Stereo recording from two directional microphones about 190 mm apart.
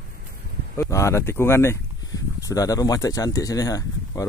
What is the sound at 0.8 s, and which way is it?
Speech, 15° left (ahead or behind).